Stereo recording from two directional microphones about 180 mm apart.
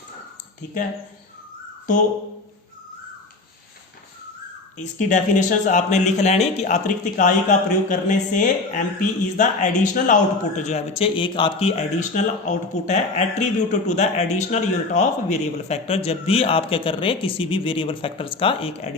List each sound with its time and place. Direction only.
4.8 s a man's voice: 45° left (ahead or behind)
11.9 s a man's voice: 40° left (ahead or behind)